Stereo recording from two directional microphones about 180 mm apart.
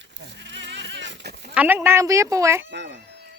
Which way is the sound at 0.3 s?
85° right.